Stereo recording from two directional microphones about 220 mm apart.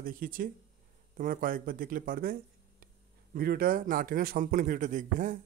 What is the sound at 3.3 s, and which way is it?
A man's voice, 40° right (ahead or behind).